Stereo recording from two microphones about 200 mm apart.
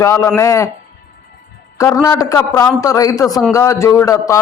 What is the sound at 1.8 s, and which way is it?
A man's voice, 15° left (ahead or behind).